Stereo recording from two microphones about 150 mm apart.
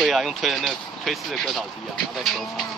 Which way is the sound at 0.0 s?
Centre (ahead or behind).